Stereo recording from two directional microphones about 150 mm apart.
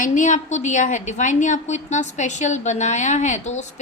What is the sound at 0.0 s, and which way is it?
A woman's voice, 55° left (ahead or behind).